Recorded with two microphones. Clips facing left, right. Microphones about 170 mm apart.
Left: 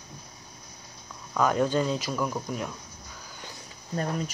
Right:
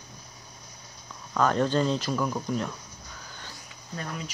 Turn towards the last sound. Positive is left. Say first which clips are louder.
# left 6 dB
turn(degrees=40)  # may be behind; listen again after turning